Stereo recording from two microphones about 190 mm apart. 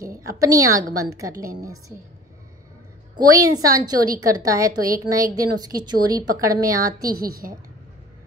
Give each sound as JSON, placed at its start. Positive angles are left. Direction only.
{"t": 0.0, "sound": "a woman's voice", "side_deg": -15}
{"t": 3.2, "sound": "a woman's voice", "side_deg": -20}